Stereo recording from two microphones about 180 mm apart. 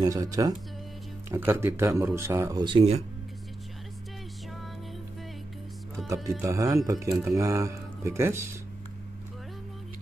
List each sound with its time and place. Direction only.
0.0 s speech: 20° right (ahead or behind)
6.0 s speech: centre (ahead or behind)
6.4 s speech: 15° right (ahead or behind)